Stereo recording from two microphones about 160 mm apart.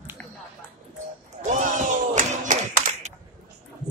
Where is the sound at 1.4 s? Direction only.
55° right (ahead or behind).